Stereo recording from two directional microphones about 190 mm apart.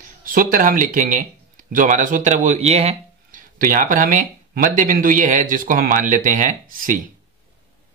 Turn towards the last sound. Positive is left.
turn(degrees=-45)  # may be behind; listen again after turning